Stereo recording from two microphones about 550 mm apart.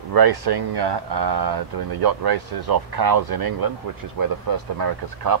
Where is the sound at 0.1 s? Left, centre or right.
Right.